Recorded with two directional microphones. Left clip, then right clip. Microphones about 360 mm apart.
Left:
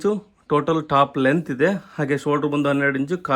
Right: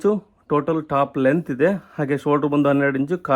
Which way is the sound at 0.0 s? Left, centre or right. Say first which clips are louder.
Right 2 dB; centre.